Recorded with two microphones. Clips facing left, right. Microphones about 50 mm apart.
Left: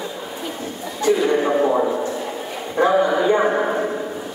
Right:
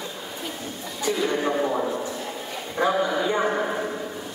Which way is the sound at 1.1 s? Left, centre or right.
Centre.